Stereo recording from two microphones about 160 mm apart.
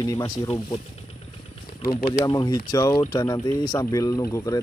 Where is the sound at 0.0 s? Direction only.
25° left (ahead or behind).